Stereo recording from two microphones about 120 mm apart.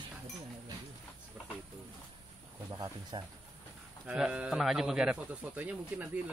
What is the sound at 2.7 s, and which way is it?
Speech, 30° right (ahead or behind).